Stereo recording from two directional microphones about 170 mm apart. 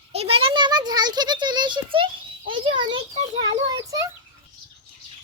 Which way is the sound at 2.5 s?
30° right (ahead or behind).